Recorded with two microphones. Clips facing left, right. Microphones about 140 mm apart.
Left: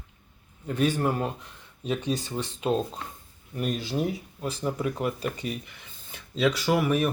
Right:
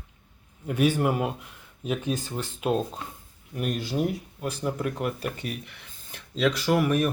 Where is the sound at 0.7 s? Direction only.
10° right (ahead or behind).